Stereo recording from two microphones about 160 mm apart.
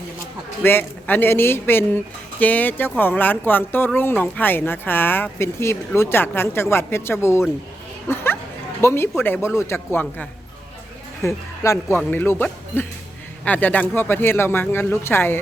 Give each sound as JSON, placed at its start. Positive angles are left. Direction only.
{"t": 0.6, "sound": "speech", "side_deg": 15}
{"t": 8.0, "sound": "a sound", "side_deg": 15}
{"t": 8.8, "sound": "speech", "side_deg": 15}